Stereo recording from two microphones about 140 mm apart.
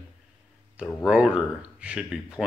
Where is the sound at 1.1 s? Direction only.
5° right (ahead or behind).